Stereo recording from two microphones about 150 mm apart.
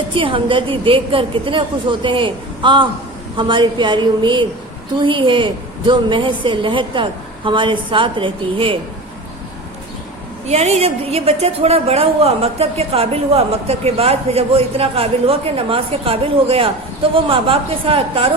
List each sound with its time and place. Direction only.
0.1 s a woman's voice: 35° right (ahead or behind)
10.4 s a woman's voice: 45° right (ahead or behind)